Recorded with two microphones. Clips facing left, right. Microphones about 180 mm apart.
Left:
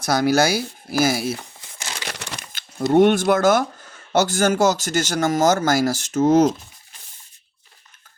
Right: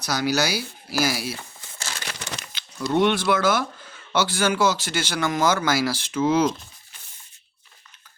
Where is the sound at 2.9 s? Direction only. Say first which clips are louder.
Left 5 dB; 45° left (ahead or behind).